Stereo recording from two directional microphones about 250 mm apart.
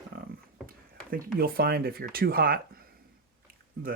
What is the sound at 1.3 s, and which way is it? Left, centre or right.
Speech, right.